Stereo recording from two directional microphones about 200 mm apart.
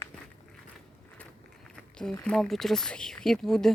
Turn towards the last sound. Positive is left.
turn(degrees=0)  # may be behind; listen again after turning